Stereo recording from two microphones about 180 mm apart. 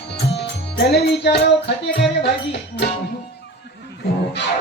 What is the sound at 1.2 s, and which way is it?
Music, 70° left (ahead or behind).